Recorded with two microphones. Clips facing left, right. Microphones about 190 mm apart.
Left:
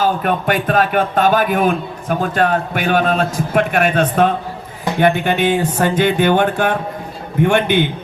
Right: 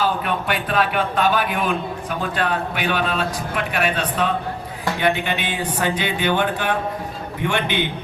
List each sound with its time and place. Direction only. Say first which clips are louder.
0.0 s a man's voice: left 5 dB; 45° left (ahead or behind)